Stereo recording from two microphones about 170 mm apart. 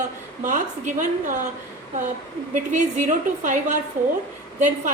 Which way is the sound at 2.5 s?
45° right (ahead or behind).